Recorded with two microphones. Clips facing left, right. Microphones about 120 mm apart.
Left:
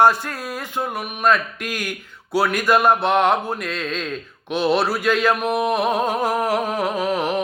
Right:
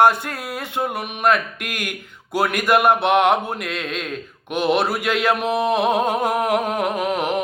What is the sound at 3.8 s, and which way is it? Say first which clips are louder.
Speech: left 1 dB; 15° right (ahead or behind).